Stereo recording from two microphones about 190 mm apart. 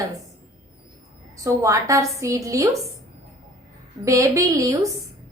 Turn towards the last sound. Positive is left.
turn(degrees=-15)  # may be behind; listen again after turning